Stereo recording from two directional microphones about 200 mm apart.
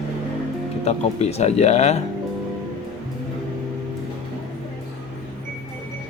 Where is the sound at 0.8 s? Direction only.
30° left (ahead or behind).